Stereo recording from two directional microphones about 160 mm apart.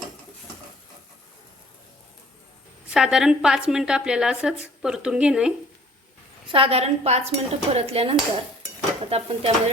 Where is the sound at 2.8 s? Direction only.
5° right (ahead or behind).